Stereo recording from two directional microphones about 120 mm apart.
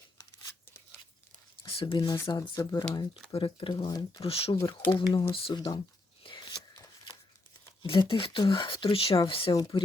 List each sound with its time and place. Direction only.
1.6 s speech: 45° left (ahead or behind)
3.3 s speech: 45° left (ahead or behind)
4.2 s speech: 50° left (ahead or behind)
4.5 s speech: 20° left (ahead or behind)
4.9 s speech: 40° left (ahead or behind)
6.2 s a sound: 40° left (ahead or behind)
7.8 s speech: 45° left (ahead or behind)
9.5 s speech: 35° left (ahead or behind)